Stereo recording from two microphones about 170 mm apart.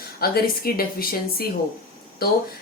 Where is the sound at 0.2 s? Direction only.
60° left (ahead or behind).